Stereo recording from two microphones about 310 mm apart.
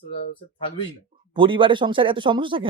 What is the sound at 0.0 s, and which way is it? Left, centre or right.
Speech, centre.